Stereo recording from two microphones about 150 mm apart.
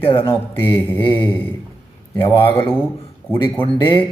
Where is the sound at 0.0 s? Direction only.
35° left (ahead or behind).